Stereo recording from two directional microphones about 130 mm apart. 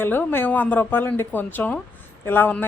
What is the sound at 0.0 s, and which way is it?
A woman's voice, 15° left (ahead or behind).